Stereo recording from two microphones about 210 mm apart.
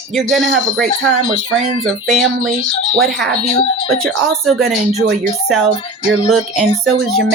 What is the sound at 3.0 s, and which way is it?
Speech, centre (ahead or behind).